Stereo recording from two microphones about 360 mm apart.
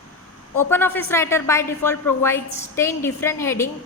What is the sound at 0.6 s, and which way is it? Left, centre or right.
A woman's voice, centre.